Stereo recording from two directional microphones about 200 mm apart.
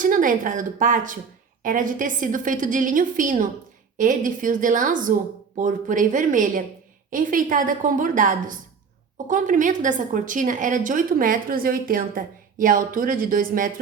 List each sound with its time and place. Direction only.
0.0 s a woman's voice: 40° right (ahead or behind)